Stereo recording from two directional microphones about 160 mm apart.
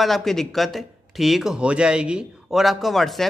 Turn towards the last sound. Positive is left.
turn(degrees=0)  # may be behind; listen again after turning